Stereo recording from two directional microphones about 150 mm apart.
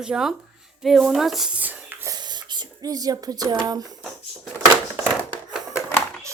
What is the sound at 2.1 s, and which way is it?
Speech, 30° right (ahead or behind).